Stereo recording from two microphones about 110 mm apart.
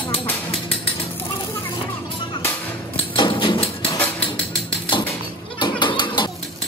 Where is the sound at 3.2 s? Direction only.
45° left (ahead or behind).